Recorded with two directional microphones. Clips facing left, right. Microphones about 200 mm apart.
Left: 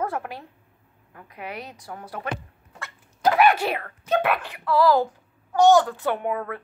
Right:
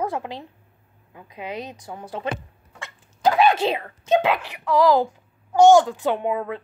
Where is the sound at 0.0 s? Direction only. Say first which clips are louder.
Right 2 dB; 20° right (ahead or behind).